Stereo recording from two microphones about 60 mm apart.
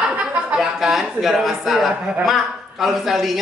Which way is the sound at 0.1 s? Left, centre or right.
Right.